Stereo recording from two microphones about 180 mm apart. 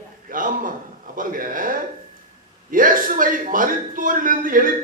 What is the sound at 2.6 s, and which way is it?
A man's voice, 50° right (ahead or behind).